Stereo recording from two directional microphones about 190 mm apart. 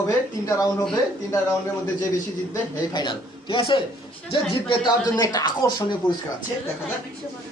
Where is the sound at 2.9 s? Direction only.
25° left (ahead or behind).